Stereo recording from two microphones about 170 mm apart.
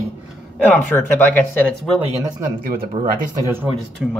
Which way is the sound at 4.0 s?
Centre (ahead or behind).